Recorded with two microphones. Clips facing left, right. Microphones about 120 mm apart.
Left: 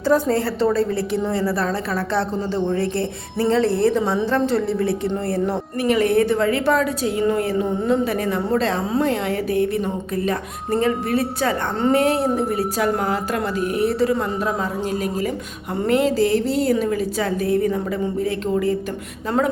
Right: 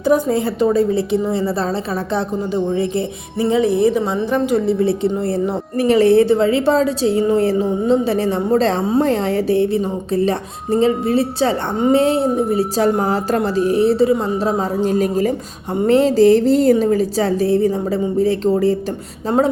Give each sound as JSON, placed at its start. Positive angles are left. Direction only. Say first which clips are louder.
{"t": 0.0, "sound": "a woman's voice", "louder": "right 3 dB", "side_deg": -15}
{"t": 5.7, "sound": "a woman's voice", "louder": "right 6 dB", "side_deg": -35}